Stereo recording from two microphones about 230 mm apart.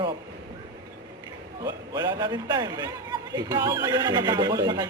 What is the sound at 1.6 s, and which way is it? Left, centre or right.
Speech, centre.